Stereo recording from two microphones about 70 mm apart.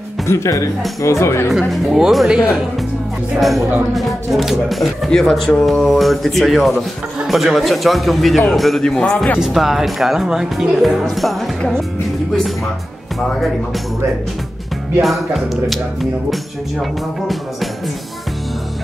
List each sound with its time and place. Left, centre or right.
0.3 s speech: left
1.5 s speech: centre
9.4 s speech: centre
15.0 s speech: centre